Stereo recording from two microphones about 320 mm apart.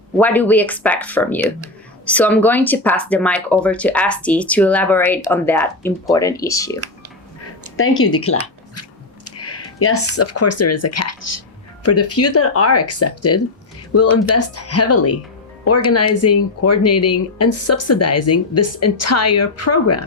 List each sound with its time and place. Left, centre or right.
0.2 s speech: centre
8.0 s speech: left